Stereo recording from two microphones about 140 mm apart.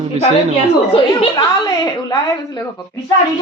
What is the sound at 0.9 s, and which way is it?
Speech, 40° left (ahead or behind).